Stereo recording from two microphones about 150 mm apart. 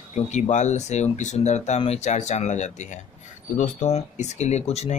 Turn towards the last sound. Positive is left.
turn(degrees=45)  # may be behind; listen again after turning